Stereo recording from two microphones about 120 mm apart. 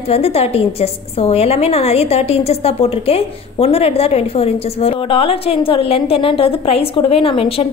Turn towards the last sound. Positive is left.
turn(degrees=55)  # may be behind; listen again after turning